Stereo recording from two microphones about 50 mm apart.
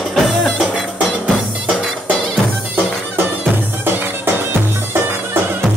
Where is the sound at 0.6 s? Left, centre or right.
Right.